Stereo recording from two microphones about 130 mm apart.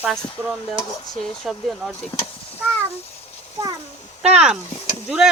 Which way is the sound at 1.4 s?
Centre (ahead or behind).